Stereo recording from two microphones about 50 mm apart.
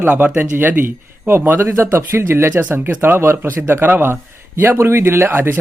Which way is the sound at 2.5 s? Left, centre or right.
Right.